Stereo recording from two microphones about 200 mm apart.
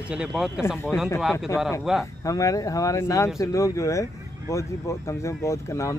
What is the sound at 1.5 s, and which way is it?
Speech, 15° left (ahead or behind).